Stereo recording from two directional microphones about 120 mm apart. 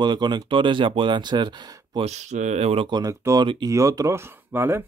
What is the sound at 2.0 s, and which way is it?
Speech, 75° right (ahead or behind).